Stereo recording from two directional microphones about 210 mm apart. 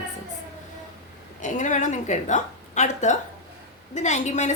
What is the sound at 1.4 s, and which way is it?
A woman's voice, 35° left (ahead or behind).